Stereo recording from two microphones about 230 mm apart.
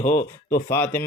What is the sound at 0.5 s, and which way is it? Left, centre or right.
Speech, centre.